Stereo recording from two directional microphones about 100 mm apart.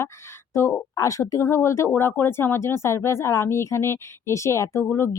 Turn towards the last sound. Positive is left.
turn(degrees=25)  # may be behind; listen again after turning